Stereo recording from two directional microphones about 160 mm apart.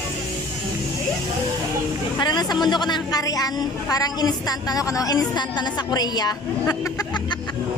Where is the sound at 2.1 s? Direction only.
25° left (ahead or behind).